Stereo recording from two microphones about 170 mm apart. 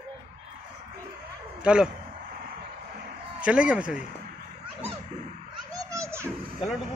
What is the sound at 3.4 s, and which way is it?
Speech, 5° right (ahead or behind).